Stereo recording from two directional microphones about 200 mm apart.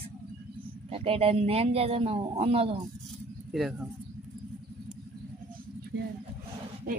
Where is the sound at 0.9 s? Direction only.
30° right (ahead or behind).